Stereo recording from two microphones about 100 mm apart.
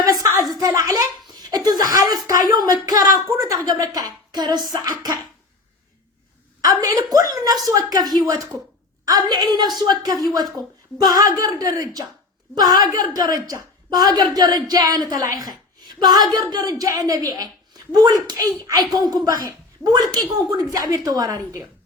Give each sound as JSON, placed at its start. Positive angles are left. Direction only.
{"t": 0.0, "sound": "a sound", "side_deg": -35}
{"t": 1.9, "sound": "a woman's voice", "side_deg": -40}
{"t": 6.6, "sound": "a woman's voice", "side_deg": -35}